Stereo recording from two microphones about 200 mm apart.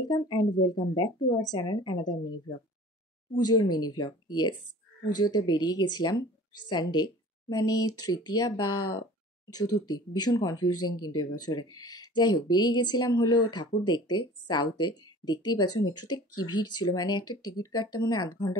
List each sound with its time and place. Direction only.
0.0 s speech: 20° left (ahead or behind)
3.7 s speech: 20° left (ahead or behind)